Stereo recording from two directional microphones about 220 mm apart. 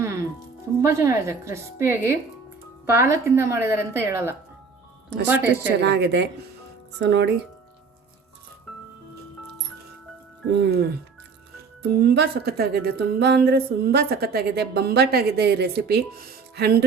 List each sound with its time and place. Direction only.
0.8 s speech: 10° right (ahead or behind)
5.8 s speech: 50° right (ahead or behind)
10.5 s speech: 45° right (ahead or behind)